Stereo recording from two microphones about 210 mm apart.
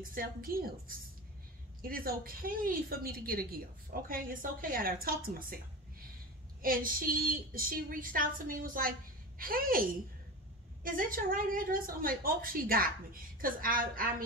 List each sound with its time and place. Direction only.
0.1 s a woman's voice: 45° right (ahead or behind)
6.6 s a woman's voice: 40° right (ahead or behind)